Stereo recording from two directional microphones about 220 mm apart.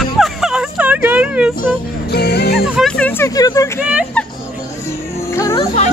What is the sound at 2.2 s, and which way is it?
Music, 45° left (ahead or behind).